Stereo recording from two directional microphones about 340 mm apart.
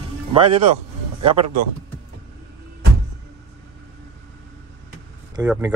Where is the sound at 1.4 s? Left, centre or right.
Right.